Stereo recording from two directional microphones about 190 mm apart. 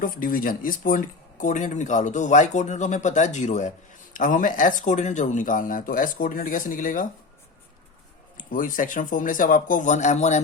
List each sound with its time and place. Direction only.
0.0 s speech: 45° left (ahead or behind)
8.4 s speech: 45° left (ahead or behind)